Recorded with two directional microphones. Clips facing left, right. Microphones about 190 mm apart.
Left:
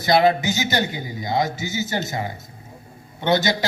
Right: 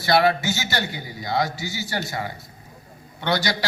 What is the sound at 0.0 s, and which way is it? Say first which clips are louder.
A man's voice: left 2 dB; 20° left (ahead or behind).